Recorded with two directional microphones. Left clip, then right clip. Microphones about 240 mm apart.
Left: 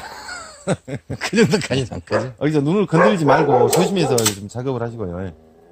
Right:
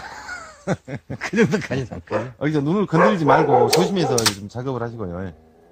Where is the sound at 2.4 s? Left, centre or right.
Left.